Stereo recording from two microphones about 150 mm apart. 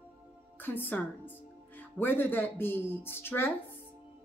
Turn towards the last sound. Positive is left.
turn(degrees=15)  # may be behind; listen again after turning